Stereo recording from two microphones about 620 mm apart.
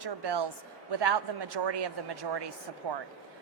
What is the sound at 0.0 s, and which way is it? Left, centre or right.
A woman's voice, right.